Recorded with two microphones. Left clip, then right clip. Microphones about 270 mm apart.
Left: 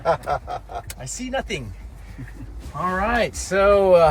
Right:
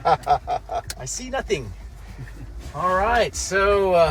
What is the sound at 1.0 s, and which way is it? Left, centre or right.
Speech, centre.